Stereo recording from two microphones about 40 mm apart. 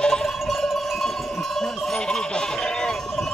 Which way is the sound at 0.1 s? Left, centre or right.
Centre.